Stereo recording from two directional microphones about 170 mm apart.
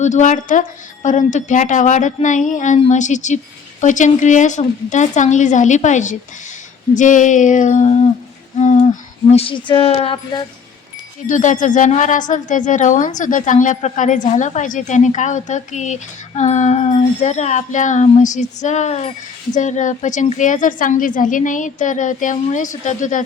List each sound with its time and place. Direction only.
0.0 s a woman's voice: 45° left (ahead or behind)
8.5 s a sound: 40° left (ahead or behind)
11.3 s a woman's voice: 50° left (ahead or behind)